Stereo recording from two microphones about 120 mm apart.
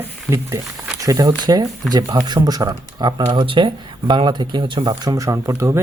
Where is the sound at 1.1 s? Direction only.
30° right (ahead or behind).